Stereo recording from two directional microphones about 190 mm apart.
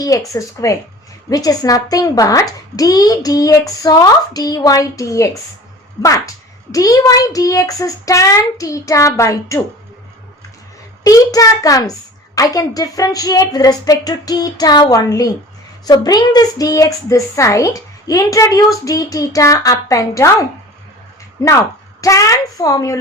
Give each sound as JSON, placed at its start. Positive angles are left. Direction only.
{"t": 0.0, "sound": "a woman's voice", "side_deg": 20}
{"t": 11.0, "sound": "a child's voice", "side_deg": 20}
{"t": 21.4, "sound": "a woman's voice", "side_deg": 15}